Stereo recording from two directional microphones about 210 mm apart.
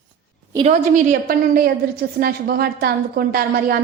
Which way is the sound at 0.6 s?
35° right (ahead or behind).